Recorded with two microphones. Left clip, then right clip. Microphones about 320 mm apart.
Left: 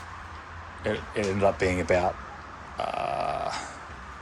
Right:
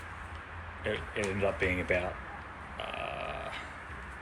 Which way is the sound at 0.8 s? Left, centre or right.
Left.